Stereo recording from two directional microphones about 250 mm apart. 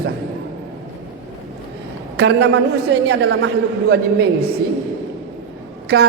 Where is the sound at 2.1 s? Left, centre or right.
Right.